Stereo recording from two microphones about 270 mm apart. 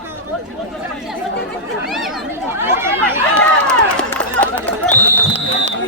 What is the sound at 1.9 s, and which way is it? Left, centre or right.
Chatter, centre.